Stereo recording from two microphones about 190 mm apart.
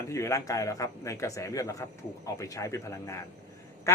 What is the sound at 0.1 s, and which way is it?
A man's voice, 15° left (ahead or behind).